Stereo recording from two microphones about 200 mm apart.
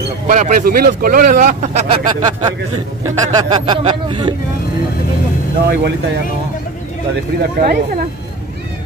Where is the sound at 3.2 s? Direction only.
20° right (ahead or behind).